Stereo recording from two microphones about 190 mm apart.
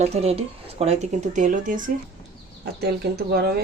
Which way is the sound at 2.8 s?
55° right (ahead or behind).